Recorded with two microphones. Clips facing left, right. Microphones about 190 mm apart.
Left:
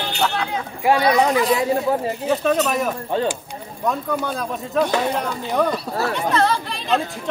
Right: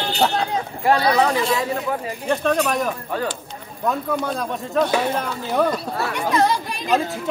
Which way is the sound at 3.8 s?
Centre (ahead or behind).